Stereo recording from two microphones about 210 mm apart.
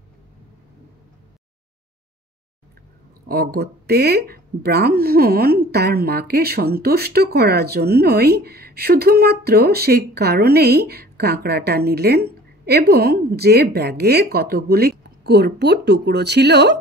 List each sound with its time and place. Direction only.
3.3 s speech: 45° right (ahead or behind)